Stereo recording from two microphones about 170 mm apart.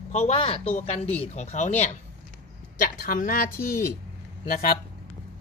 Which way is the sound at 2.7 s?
55° left (ahead or behind).